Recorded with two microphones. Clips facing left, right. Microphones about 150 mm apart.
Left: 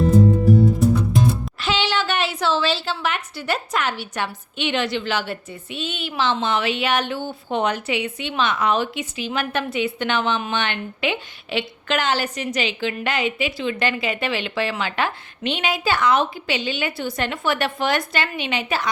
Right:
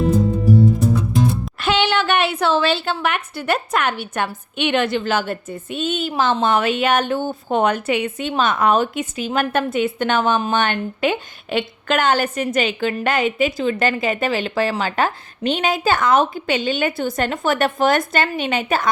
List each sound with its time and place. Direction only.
1.5 s a woman's voice: 55° right (ahead or behind)